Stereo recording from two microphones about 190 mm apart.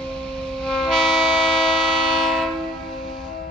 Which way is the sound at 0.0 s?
5° left (ahead or behind).